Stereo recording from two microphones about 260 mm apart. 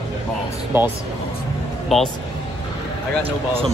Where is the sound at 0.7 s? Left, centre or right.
Centre.